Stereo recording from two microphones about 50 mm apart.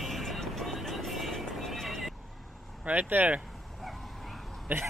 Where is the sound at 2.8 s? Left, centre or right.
Right.